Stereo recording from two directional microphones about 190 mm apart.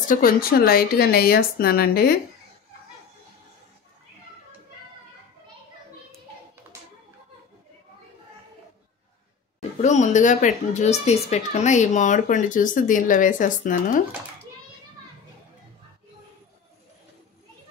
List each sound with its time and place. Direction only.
0.1 s a woman's voice: 50° left (ahead or behind)
9.6 s speech: 40° left (ahead or behind)